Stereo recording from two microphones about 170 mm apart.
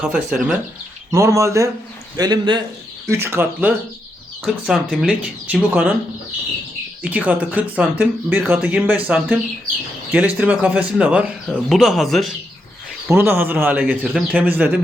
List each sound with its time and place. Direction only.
0.0 s speech: 5° right (ahead or behind)
1.1 s a man's voice: 15° right (ahead or behind)
3.1 s speech: 15° right (ahead or behind)
4.4 s speech: centre (ahead or behind)
7.0 s speech: 10° right (ahead or behind)
13.1 s speech: 10° right (ahead or behind)